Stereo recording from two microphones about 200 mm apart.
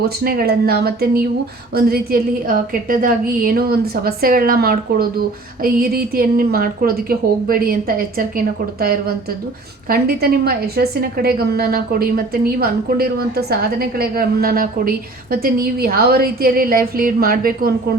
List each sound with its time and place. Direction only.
0.2 s a woman's voice: 50° right (ahead or behind)